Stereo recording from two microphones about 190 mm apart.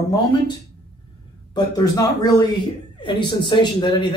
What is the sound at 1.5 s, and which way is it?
A man's voice, 20° left (ahead or behind).